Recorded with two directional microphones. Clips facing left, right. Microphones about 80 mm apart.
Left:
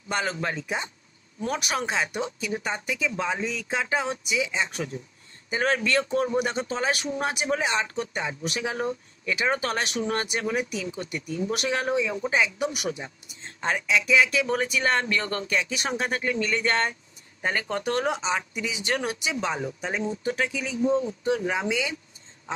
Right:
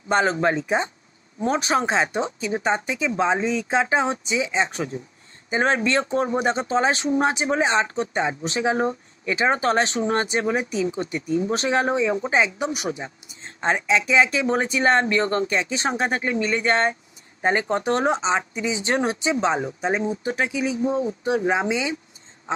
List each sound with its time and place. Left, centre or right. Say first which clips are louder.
0.1 s speech: right 8 dB; right